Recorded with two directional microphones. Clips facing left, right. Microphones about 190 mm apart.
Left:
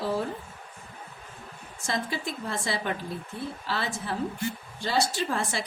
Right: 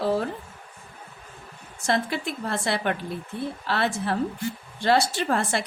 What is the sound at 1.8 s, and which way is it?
Speech, 65° right (ahead or behind).